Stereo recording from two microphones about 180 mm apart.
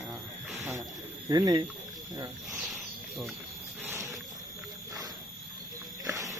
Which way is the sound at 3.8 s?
15° right (ahead or behind).